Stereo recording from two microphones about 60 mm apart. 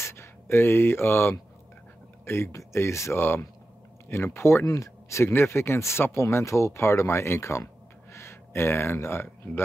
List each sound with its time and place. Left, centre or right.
0.0 s speech: left
4.7 s speech: left